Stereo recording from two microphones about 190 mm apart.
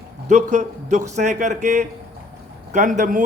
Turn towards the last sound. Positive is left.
turn(degrees=-45)  # may be behind; listen again after turning